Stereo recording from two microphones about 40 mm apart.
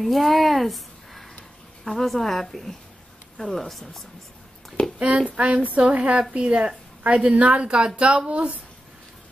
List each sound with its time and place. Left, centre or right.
0.0 s a woman's voice: centre
5.3 s a woman's voice: right
7.6 s a woman's voice: right